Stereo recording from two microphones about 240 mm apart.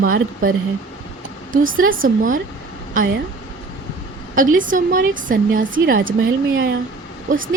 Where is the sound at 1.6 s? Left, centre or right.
Right.